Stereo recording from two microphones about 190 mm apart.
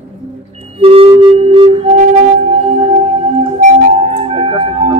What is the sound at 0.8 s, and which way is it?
Music, 30° right (ahead or behind).